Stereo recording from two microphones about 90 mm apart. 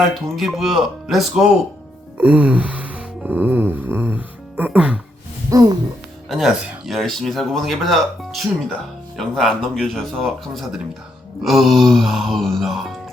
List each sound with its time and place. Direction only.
0.0 s speech: centre (ahead or behind)
2.1 s music: 15° right (ahead or behind)
5.5 s speech: 45° right (ahead or behind)
6.2 s speech: centre (ahead or behind)